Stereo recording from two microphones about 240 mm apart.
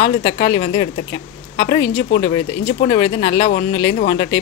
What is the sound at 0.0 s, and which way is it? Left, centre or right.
Speech, left.